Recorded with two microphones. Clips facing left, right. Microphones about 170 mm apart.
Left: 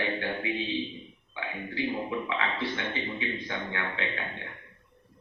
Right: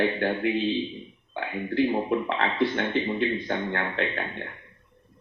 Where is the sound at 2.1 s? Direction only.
45° right (ahead or behind).